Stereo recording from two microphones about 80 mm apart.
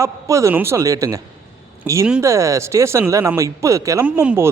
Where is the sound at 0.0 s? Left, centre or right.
Right.